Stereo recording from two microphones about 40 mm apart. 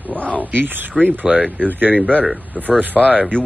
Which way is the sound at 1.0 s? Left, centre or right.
Centre.